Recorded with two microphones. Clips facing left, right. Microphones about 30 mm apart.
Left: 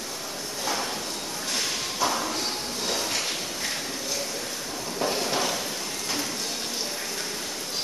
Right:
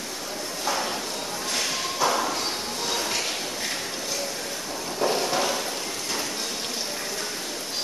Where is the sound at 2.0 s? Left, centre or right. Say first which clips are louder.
Right 3 dB; centre.